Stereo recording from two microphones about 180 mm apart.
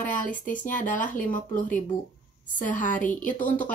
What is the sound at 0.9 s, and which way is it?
Speech, 45° left (ahead or behind).